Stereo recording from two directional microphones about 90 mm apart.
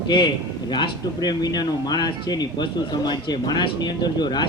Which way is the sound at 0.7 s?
55° left (ahead or behind).